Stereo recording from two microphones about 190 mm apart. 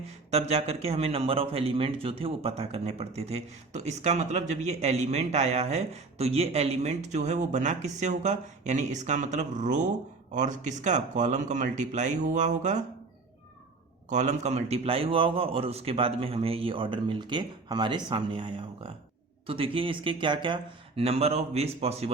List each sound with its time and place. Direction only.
0.3 s a man's voice: 35° right (ahead or behind)
14.1 s a man's voice: 40° right (ahead or behind)